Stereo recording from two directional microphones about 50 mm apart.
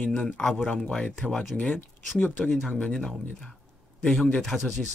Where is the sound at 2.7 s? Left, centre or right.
Left.